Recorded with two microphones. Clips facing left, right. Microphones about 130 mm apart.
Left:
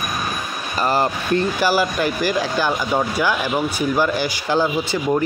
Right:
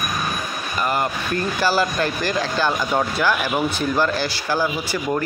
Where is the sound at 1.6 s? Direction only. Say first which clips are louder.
Left 1 dB; 15° left (ahead or behind).